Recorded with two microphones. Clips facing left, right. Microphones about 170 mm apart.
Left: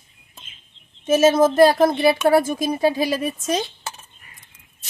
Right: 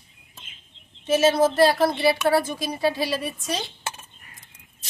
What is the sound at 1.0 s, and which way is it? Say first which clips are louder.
Speech: left 4 dB; 45° left (ahead or behind).